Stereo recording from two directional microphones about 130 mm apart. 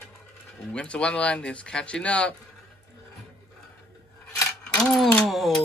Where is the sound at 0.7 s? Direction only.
10° left (ahead or behind).